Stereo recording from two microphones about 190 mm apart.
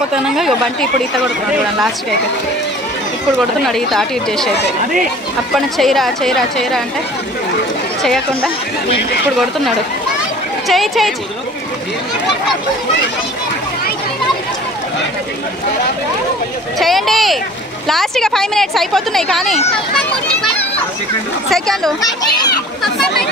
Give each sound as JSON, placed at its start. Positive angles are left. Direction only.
{"t": 0.1, "sound": "a woman's voice", "side_deg": 0}
{"t": 3.3, "sound": "a woman's voice", "side_deg": 0}
{"t": 5.5, "sound": "a woman's voice", "side_deg": 0}
{"t": 8.0, "sound": "a woman's voice", "side_deg": 0}
{"t": 10.7, "sound": "a woman's voice", "side_deg": 0}
{"t": 16.7, "sound": "a woman's voice", "side_deg": 0}
{"t": 21.5, "sound": "a woman's voice", "side_deg": 0}
{"t": 22.2, "sound": "a child's voice", "side_deg": 20}